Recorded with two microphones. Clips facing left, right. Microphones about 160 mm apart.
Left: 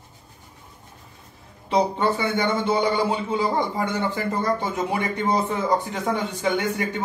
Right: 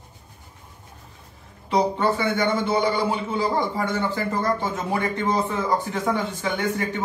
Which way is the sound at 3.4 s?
20° left (ahead or behind).